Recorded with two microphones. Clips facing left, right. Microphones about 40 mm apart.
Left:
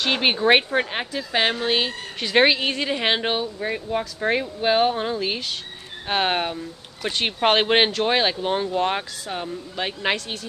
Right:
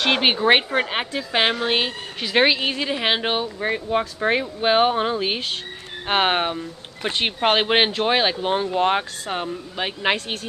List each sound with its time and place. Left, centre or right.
0.4 s speech: centre
0.7 s a woman's voice: right
2.2 s speech: centre
3.6 s a woman's voice: right
4.2 s a woman's voice: centre
7.3 s speech: centre